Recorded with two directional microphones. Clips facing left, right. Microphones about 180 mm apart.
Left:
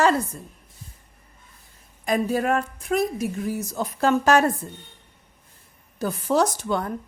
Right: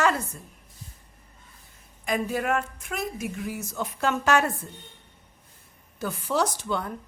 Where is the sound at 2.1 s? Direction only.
35° left (ahead or behind).